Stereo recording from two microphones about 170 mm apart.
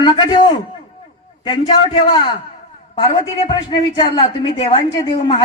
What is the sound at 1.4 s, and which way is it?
Speech, 30° left (ahead or behind).